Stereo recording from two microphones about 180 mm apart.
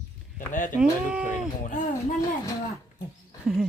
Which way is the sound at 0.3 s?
45° left (ahead or behind).